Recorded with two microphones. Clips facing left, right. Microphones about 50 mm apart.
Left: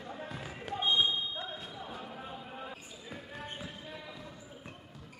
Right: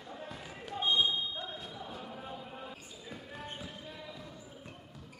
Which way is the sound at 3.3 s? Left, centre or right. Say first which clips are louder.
Left 1 dB; centre.